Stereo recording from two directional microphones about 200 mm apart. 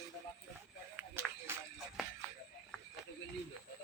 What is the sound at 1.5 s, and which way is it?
Music, 10° right (ahead or behind).